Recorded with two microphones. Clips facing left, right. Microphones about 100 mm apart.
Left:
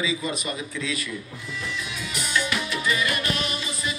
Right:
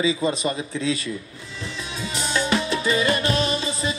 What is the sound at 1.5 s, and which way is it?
Music, 30° right (ahead or behind).